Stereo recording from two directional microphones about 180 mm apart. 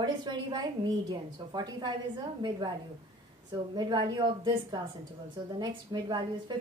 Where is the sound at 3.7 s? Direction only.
25° right (ahead or behind).